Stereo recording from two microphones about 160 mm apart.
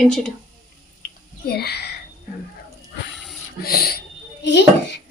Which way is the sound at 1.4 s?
80° left.